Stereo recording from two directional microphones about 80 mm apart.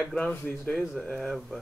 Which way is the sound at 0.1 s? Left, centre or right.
Centre.